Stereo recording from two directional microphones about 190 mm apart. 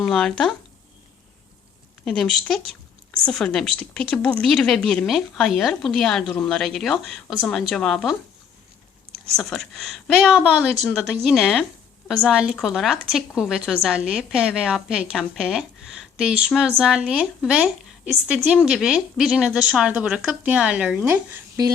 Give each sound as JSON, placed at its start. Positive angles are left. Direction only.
{"t": 0.0, "sound": "speech", "side_deg": 0}
{"t": 2.0, "sound": "speech", "side_deg": 5}
{"t": 9.3, "sound": "speech", "side_deg": 0}